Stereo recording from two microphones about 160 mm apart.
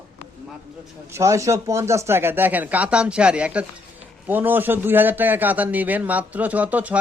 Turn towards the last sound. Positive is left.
turn(degrees=-10)  # may be behind; listen again after turning